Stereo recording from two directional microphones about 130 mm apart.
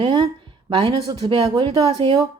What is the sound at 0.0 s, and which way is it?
A woman's voice, 40° right (ahead or behind).